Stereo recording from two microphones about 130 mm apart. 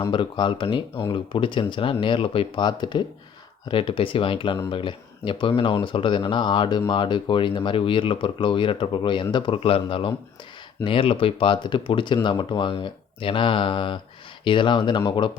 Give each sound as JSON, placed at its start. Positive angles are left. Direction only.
{"t": 0.1, "sound": "speech", "side_deg": 40}